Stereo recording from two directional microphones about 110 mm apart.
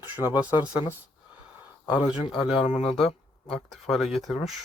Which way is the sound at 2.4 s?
60° left (ahead or behind).